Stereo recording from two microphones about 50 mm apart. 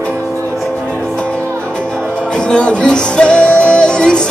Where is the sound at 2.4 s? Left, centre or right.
Left.